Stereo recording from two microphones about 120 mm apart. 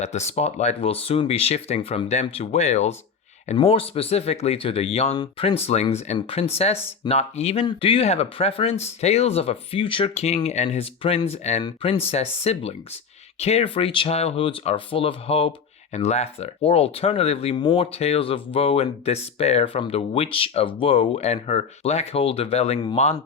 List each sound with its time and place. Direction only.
0.0 s speech: 70° left (ahead or behind)
3.6 s speech: 50° left (ahead or behind)
11.3 s speech: 65° left (ahead or behind)
11.8 s speech: 55° left (ahead or behind)
17.5 s speech: 40° left (ahead or behind)
17.9 s speech: 60° left (ahead or behind)